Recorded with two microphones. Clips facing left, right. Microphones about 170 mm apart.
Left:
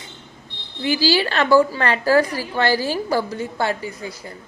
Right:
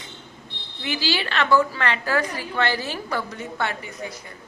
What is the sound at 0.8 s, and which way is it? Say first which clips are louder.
A woman's voice: left 7 dB; 35° left (ahead or behind).